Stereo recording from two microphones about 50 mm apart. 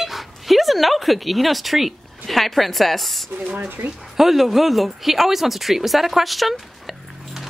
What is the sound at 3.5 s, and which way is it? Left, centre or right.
Speech, right.